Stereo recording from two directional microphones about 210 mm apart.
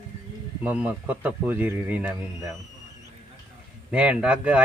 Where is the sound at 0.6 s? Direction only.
5° right (ahead or behind).